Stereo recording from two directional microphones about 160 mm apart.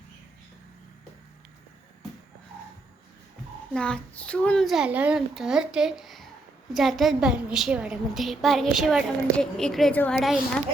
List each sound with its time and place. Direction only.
3.8 s a woman's voice: 5° left (ahead or behind)